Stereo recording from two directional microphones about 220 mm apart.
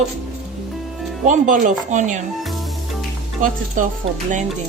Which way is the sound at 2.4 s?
Centre (ahead or behind).